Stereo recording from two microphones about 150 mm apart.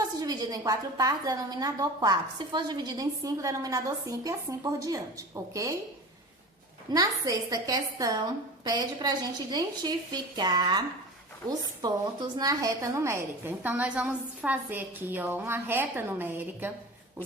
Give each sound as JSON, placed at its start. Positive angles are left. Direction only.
{"t": 0.2, "sound": "a woman's voice", "side_deg": -25}
{"t": 6.9, "sound": "a woman's voice", "side_deg": -25}